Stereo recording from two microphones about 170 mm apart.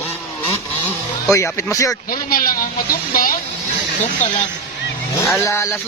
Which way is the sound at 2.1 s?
60° left (ahead or behind).